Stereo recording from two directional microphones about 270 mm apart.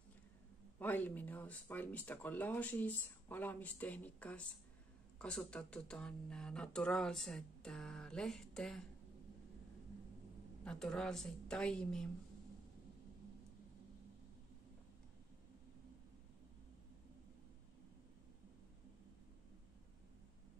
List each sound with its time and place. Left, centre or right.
0.7 s speech: centre
10.6 s speech: centre